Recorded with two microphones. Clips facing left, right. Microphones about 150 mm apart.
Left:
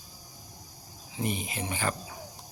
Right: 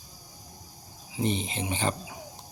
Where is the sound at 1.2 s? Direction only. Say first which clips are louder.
Right 3 dB; 25° right (ahead or behind).